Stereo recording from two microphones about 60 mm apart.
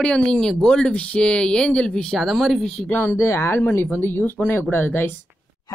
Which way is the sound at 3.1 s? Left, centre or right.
Left.